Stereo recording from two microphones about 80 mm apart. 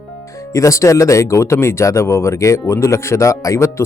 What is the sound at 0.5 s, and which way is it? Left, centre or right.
Speech, left.